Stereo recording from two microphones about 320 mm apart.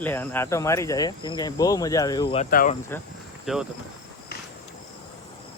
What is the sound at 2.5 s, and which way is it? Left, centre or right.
Speech, left.